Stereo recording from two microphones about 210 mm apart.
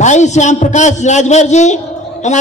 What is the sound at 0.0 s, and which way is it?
A man's voice, 35° left (ahead or behind).